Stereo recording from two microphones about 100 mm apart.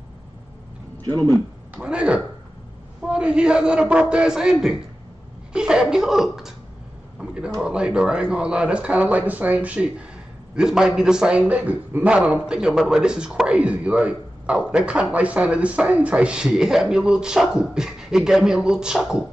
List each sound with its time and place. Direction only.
1.0 s speech: 40° right (ahead or behind)
1.8 s a man's voice: 10° right (ahead or behind)